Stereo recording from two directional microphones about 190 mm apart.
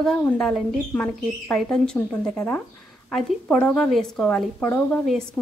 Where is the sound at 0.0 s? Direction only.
5° left (ahead or behind).